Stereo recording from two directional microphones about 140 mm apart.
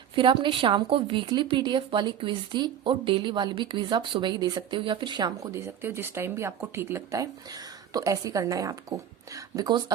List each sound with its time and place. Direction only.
0.2 s a woman's voice: 35° right (ahead or behind)